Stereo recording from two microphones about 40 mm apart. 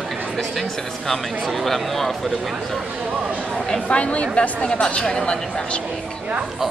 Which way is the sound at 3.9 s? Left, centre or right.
Left.